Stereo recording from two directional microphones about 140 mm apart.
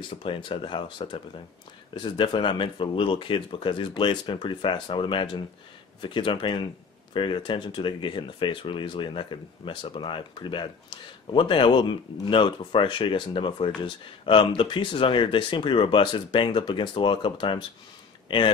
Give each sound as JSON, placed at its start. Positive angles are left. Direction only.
{"t": 0.1, "sound": "speech", "side_deg": 40}